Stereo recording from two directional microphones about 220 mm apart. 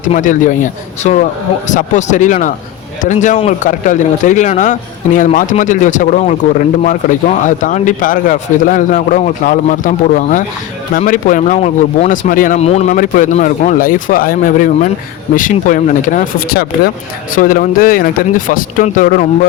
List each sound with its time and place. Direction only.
0.0 s speech: 35° left (ahead or behind)